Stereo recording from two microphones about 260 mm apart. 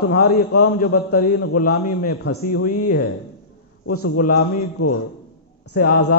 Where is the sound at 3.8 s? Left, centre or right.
Left.